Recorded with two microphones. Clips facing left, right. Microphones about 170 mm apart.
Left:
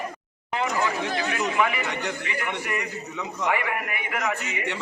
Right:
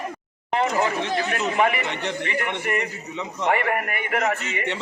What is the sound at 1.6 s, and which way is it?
Speech, 55° right (ahead or behind).